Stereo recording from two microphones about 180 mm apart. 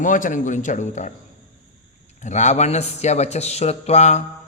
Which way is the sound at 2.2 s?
40° left (ahead or behind).